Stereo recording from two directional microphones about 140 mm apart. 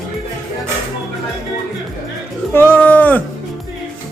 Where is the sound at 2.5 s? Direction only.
15° left (ahead or behind).